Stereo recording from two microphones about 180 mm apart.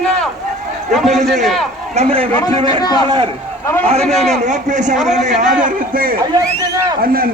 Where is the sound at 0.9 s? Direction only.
Centre (ahead or behind).